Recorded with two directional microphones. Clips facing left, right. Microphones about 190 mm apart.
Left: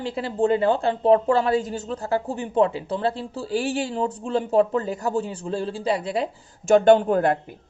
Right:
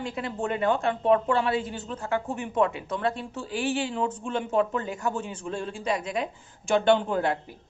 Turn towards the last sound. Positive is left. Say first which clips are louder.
# left 6 dB
turn(degrees=50)  # may be behind; listen again after turning